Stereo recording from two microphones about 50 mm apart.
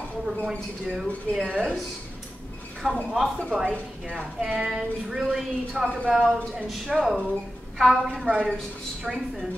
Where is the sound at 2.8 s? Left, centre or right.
Centre.